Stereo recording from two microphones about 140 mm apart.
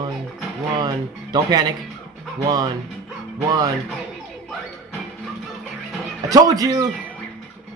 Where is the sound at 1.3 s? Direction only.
30° right (ahead or behind).